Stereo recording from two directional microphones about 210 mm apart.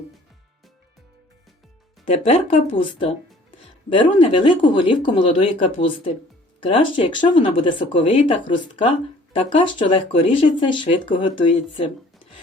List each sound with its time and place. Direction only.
2.0 s speech: 30° left (ahead or behind)